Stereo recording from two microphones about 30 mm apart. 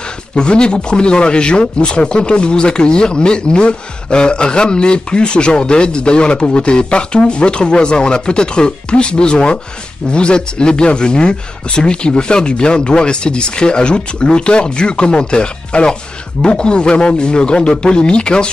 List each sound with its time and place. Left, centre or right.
0.4 s speech: left